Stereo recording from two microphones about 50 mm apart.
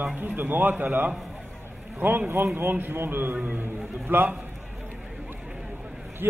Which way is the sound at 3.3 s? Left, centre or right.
Right.